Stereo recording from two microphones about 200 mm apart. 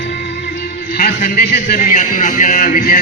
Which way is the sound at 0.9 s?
50° left (ahead or behind).